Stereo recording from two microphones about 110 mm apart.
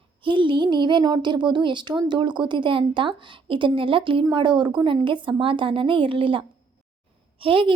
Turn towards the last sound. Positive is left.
turn(degrees=-55)  # may be behind; listen again after turning